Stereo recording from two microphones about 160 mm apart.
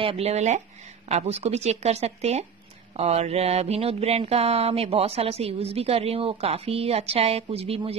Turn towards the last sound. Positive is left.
turn(degrees=-40)  # may be behind; listen again after turning